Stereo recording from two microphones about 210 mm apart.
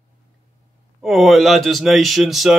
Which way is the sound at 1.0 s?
Centre (ahead or behind).